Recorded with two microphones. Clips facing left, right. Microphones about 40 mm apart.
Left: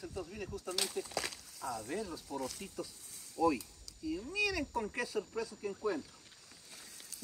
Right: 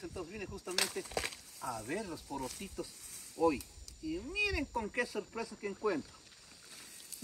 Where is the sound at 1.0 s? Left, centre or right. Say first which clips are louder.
Right 1 dB; right.